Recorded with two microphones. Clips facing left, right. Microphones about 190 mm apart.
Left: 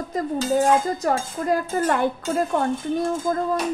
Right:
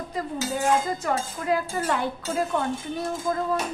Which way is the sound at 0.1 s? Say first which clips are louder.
Left 8 dB; 45° left (ahead or behind).